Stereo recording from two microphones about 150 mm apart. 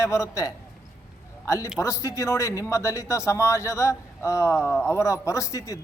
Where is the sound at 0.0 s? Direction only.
20° left (ahead or behind).